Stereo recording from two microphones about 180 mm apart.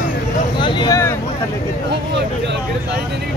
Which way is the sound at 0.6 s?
25° left (ahead or behind).